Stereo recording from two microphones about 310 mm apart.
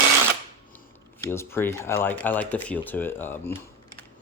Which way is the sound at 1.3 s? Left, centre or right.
Centre.